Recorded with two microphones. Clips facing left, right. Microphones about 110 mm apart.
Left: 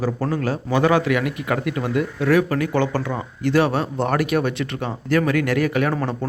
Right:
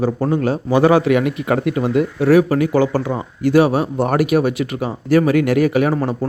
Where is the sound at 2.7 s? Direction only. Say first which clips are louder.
Right 5 dB; 10° right (ahead or behind).